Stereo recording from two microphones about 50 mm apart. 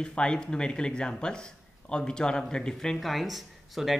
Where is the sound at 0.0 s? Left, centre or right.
Centre.